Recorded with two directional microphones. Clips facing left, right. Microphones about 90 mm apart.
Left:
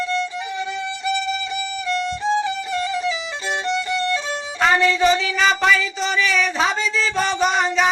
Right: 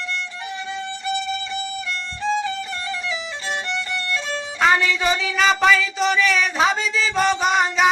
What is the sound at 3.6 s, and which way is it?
Violin, 20° left (ahead or behind).